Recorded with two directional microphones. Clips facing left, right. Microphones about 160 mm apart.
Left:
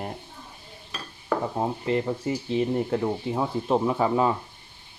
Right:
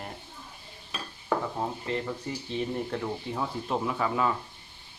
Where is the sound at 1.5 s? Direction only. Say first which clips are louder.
Left 6 dB; 25° left (ahead or behind).